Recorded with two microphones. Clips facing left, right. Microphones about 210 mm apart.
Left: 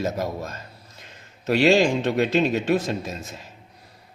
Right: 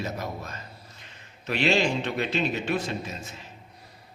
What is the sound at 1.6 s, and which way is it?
A man's voice, 40° left (ahead or behind).